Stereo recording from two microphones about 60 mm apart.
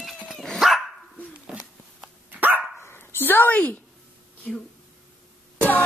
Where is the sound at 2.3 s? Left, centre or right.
Right.